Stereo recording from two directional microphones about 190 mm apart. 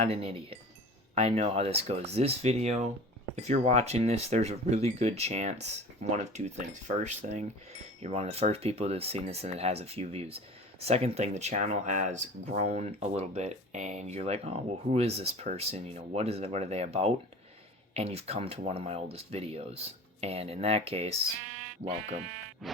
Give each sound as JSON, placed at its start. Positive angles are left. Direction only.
{"t": 0.0, "sound": "speech", "side_deg": -30}
{"t": 22.6, "sound": "mosquito", "side_deg": 0}